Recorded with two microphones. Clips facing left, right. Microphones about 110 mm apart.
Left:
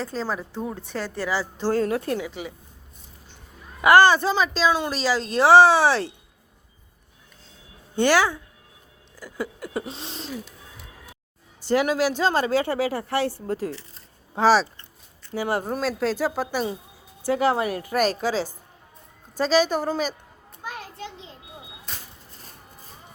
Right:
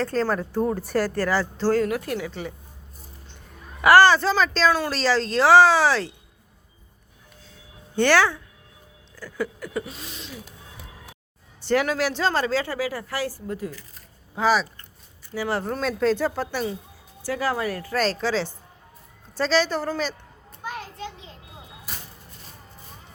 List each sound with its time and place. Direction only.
0.0 s speech: centre (ahead or behind)
1.6 s a woman's voice: 25° left (ahead or behind)
2.2 s a woman's voice: 5° left (ahead or behind)
3.8 s a woman's voice: 20° left (ahead or behind)
7.9 s a woman's voice: 15° left (ahead or behind); by 10.4 s 35° left (ahead or behind)
11.7 s a woman's voice: 10° left (ahead or behind); by 14.8 s 30° left (ahead or behind)
15.4 s a woman's voice: 15° left (ahead or behind)
15.8 s a woman's voice: 5° left (ahead or behind)
17.2 s a woman's voice: 20° left (ahead or behind)
21.0 s a sound: 30° left (ahead or behind)
21.9 s vehicle: 5° right (ahead or behind)